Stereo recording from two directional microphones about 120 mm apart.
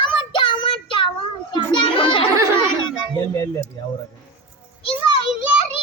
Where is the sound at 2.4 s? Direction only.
25° right (ahead or behind).